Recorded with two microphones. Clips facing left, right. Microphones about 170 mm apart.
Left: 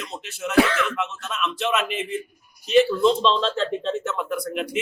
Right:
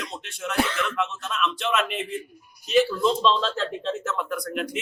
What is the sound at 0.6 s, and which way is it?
Speech, 75° left (ahead or behind).